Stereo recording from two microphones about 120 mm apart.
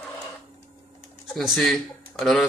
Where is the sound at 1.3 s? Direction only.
Centre (ahead or behind).